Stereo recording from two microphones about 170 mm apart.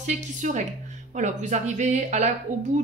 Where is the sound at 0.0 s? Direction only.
45° right (ahead or behind).